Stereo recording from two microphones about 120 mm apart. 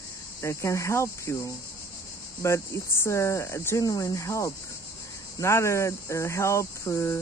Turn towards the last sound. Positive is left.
turn(degrees=25)  # may be behind; listen again after turning